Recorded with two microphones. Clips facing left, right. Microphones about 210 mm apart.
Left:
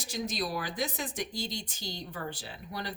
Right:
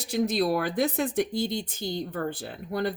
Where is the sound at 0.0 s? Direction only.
60° right (ahead or behind).